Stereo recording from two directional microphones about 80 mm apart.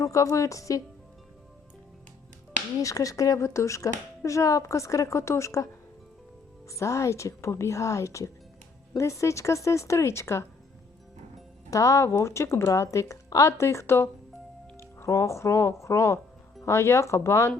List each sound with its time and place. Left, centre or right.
0.0 s a woman's voice: left
2.8 s speech: left
6.7 s speech: left
11.7 s speech: left